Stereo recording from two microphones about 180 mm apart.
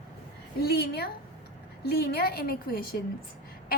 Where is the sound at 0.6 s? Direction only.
65° left (ahead or behind).